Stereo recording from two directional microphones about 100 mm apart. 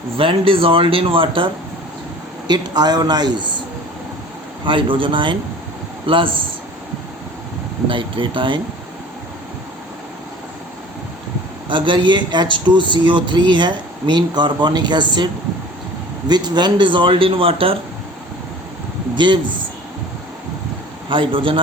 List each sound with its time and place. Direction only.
0.2 s a man's voice: 60° right (ahead or behind)
2.5 s a man's voice: 45° right (ahead or behind)
4.6 s a man's voice: 55° right (ahead or behind)
7.9 s a man's voice: 55° right (ahead or behind)
11.7 s a man's voice: 55° right (ahead or behind)
16.3 s a man's voice: 45° right (ahead or behind); by 17.7 s 65° right (ahead or behind)
19.1 s speech: 50° right (ahead or behind)
21.1 s a man's voice: 60° right (ahead or behind)